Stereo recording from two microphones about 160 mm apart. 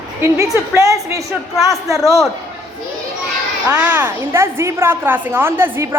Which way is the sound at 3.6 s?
10° right (ahead or behind).